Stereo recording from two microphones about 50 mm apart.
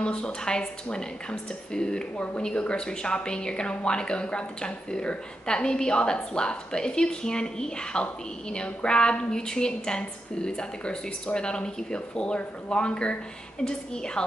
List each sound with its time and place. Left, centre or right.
0.0 s speech: centre